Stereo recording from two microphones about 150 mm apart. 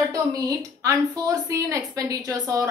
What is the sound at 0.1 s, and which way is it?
A woman's voice, 25° right (ahead or behind).